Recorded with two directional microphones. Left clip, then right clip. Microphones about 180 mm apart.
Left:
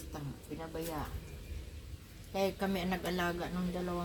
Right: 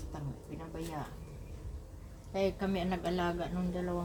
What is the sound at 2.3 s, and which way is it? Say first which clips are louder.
A woman's voice: right 1 dB; 20° right (ahead or behind).